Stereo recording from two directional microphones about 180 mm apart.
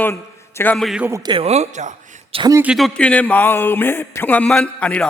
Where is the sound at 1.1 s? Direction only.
25° right (ahead or behind); by 2.4 s 40° right (ahead or behind).